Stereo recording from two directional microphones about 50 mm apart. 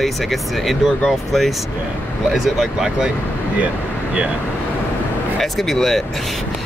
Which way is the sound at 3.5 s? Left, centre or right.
Right.